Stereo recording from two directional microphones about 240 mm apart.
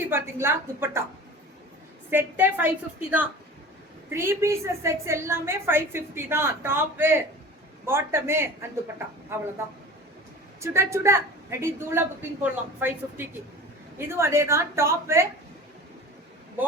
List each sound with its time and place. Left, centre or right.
0.0 s a woman's voice: centre
2.0 s a woman's voice: centre
10.6 s a woman's voice: centre